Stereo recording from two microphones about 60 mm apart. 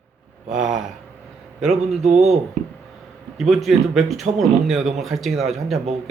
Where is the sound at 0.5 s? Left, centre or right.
Centre.